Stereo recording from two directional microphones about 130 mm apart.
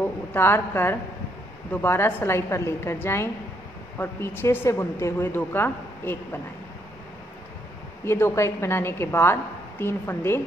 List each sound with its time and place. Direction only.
0.0 s a woman's voice: 15° left (ahead or behind)
8.0 s a woman's voice: 20° left (ahead or behind)